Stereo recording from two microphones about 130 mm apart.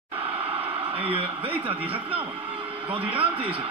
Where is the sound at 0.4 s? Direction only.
45° right (ahead or behind).